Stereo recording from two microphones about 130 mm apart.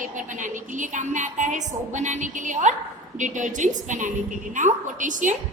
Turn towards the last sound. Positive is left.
turn(degrees=-80)